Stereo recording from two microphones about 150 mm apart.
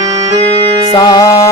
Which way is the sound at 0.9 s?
25° left (ahead or behind).